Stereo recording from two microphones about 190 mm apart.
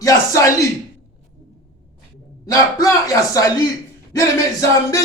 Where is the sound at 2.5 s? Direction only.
20° left (ahead or behind).